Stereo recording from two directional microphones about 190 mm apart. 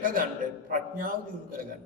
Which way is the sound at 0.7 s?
45° right (ahead or behind).